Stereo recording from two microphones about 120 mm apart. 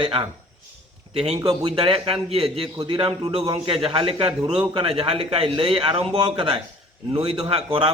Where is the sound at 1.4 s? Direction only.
35° right (ahead or behind).